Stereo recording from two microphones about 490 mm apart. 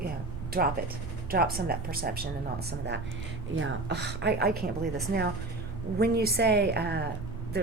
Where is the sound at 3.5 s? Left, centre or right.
Right.